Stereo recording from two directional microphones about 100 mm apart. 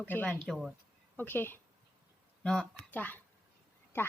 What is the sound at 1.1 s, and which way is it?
Speech, 20° left (ahead or behind).